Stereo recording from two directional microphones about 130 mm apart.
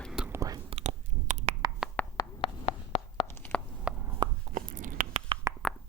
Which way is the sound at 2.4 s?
50° left (ahead or behind).